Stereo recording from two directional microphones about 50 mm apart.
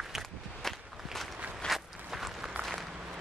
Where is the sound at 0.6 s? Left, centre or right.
Centre.